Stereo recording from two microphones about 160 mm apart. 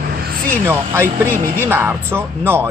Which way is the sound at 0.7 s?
15° right (ahead or behind).